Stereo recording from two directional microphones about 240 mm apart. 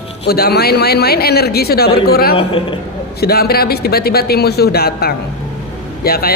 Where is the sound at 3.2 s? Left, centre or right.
Left.